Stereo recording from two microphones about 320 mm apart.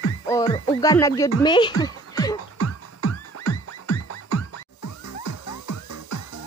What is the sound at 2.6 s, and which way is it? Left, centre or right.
Music, left.